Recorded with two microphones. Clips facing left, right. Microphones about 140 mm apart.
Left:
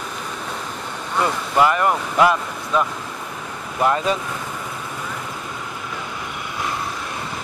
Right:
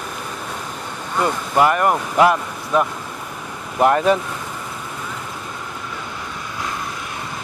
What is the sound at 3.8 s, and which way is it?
Speech, 55° right (ahead or behind).